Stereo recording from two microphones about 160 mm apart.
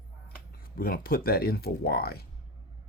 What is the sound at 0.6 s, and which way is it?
Speech, 65° left (ahead or behind).